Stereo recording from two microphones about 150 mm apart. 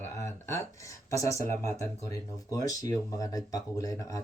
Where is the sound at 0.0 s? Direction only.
20° left (ahead or behind).